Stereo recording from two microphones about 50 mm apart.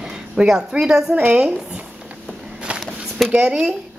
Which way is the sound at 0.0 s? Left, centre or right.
Centre.